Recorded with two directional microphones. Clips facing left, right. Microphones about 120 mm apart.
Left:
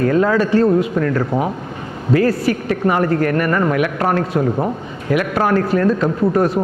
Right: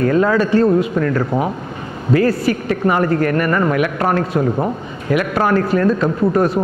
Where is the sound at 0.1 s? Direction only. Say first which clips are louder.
Even; 20° right (ahead or behind).